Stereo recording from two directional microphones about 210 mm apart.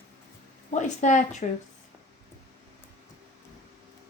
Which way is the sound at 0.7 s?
35° left (ahead or behind).